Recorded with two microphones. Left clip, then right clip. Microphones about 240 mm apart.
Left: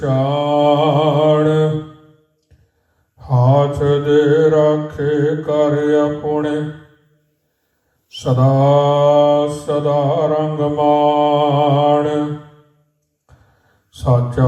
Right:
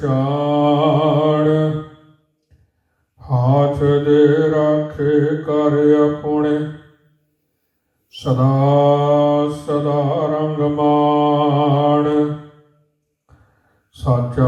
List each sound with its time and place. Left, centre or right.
0.0 s mantra: left
3.2 s mantra: left
8.1 s mantra: left
13.3 s a sound: left